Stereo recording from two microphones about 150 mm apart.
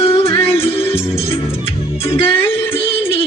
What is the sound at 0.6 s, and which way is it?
Music, 40° left (ahead or behind).